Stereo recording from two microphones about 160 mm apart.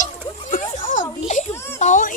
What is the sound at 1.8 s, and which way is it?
Speech, 55° left (ahead or behind).